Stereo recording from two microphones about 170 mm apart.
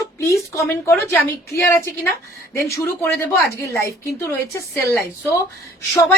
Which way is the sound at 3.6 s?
15° left (ahead or behind).